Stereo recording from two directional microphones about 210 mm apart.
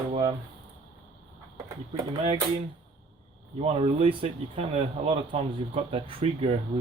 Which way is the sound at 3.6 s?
30° right (ahead or behind).